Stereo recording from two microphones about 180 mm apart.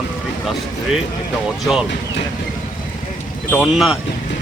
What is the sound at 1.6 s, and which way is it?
Speech, 5° right (ahead or behind).